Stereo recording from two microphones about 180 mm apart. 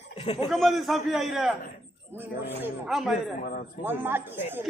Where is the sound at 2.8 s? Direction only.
Centre (ahead or behind).